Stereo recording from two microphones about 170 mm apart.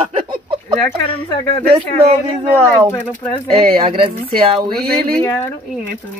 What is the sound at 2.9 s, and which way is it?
Speech, 10° left (ahead or behind).